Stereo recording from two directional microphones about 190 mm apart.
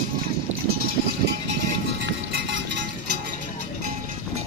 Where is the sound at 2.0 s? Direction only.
65° right (ahead or behind).